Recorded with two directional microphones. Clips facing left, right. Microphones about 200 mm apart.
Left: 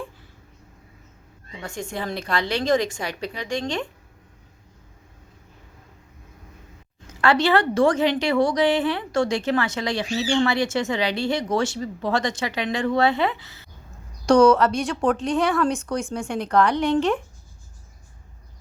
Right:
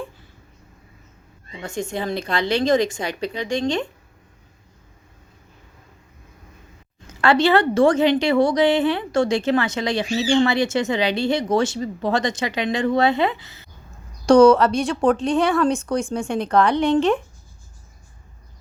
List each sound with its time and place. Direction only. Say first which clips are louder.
1.6 s a woman's voice: right 4 dB; 20° right (ahead or behind)
7.2 s a woman's voice: right 3 dB; 25° right (ahead or behind)